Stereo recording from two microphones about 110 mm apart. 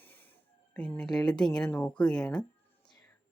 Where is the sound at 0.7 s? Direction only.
10° left (ahead or behind).